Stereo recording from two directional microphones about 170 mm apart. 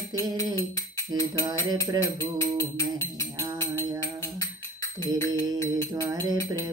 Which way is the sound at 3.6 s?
15° left (ahead or behind).